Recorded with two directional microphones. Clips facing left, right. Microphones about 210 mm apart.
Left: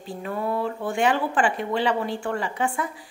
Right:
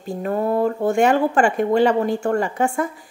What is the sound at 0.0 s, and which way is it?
Speech, 45° right (ahead or behind).